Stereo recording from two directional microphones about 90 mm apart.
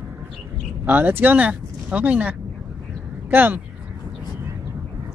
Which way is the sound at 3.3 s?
20° right (ahead or behind).